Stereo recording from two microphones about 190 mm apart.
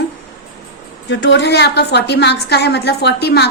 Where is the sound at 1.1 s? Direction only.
70° left (ahead or behind).